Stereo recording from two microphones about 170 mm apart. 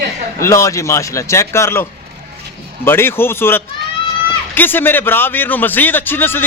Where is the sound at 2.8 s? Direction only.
15° left (ahead or behind).